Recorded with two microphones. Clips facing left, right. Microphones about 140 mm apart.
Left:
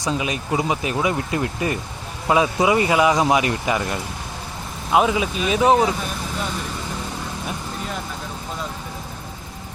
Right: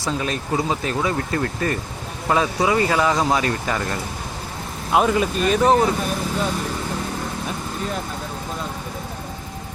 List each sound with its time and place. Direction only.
0.0 s speech: 15° left (ahead or behind)
4.9 s speech: centre (ahead or behind)